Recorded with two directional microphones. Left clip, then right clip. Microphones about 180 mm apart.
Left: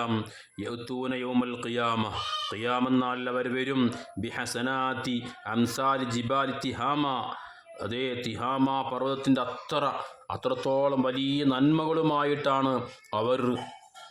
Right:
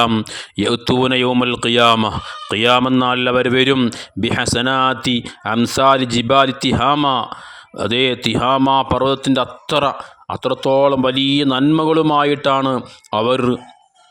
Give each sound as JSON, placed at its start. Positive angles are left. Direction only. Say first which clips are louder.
{"t": 0.3, "sound": "a man's voice", "louder": "right 18 dB", "side_deg": -55}